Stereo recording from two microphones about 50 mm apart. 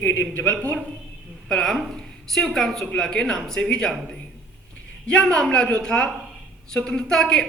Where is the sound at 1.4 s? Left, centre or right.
Centre.